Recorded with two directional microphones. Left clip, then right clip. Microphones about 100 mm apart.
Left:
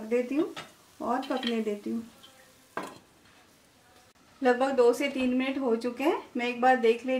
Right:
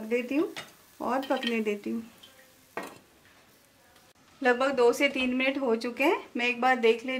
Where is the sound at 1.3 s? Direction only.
30° right (ahead or behind).